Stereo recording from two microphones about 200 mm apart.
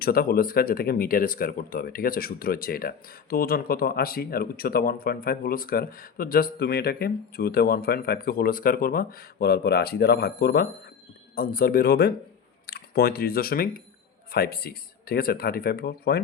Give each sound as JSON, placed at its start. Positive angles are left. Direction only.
{"t": 0.0, "sound": "speech", "side_deg": 50}